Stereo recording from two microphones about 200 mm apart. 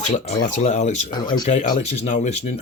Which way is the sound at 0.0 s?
35° left (ahead or behind).